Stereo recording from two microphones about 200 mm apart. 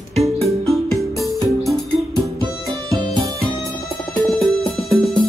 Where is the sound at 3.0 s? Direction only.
20° right (ahead or behind).